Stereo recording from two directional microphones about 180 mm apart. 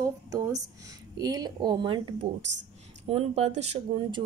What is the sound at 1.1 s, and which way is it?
A woman's voice, 20° right (ahead or behind).